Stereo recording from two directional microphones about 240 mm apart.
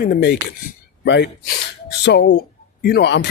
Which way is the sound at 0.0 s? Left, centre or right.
Left.